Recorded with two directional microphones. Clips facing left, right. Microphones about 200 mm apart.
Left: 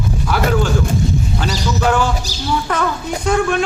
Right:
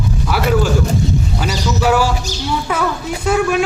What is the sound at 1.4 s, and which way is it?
Speech, 10° right (ahead or behind).